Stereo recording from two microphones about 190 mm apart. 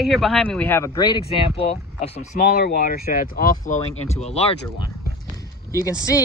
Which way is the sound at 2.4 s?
55° left (ahead or behind).